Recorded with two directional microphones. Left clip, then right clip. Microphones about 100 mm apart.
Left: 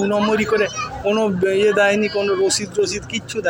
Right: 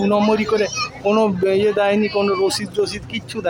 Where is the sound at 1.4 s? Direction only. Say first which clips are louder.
Left 1 dB; 20° right (ahead or behind).